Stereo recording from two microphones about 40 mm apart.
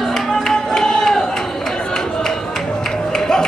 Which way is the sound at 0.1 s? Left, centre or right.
Centre.